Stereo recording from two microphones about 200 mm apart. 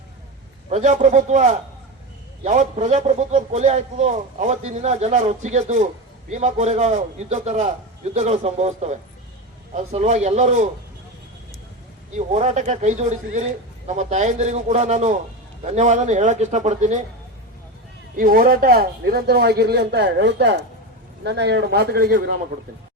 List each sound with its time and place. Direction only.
0.7 s a man's voice: 35° right (ahead or behind)
12.1 s a man's voice: 35° right (ahead or behind)
18.2 s speech: 45° right (ahead or behind)